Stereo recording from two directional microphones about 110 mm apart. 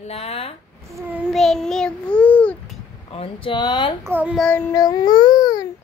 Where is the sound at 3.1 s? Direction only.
50° left (ahead or behind).